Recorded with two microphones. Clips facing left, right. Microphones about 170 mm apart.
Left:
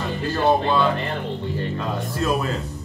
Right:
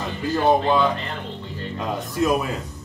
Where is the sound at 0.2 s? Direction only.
15° right (ahead or behind).